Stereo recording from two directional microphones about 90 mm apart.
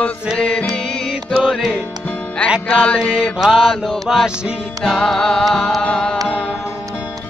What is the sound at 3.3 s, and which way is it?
Music, 5° right (ahead or behind).